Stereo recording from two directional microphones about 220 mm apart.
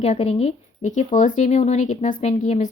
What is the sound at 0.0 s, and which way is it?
Speech, 30° left (ahead or behind).